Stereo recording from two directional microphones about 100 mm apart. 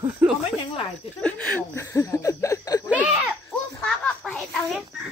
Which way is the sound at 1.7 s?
35° left (ahead or behind).